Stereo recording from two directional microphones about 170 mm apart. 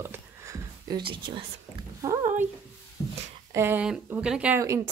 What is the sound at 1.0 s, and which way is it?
Speech, 30° right (ahead or behind).